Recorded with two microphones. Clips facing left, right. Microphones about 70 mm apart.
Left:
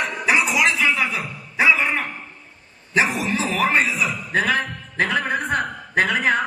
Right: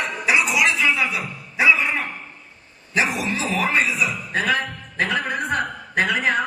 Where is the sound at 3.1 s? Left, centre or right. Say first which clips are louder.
Left 2 dB; left.